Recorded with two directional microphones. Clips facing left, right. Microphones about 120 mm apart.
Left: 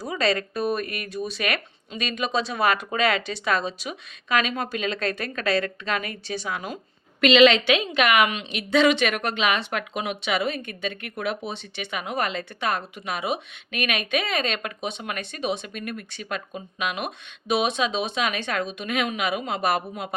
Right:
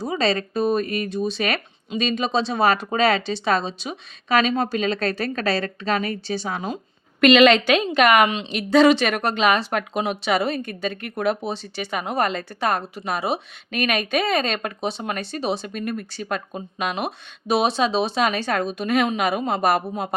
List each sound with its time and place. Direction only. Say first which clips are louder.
0.0 s a woman's voice: right 2 dB; 25° right (ahead or behind)
7.2 s a woman's voice: right 2 dB; 50° right (ahead or behind)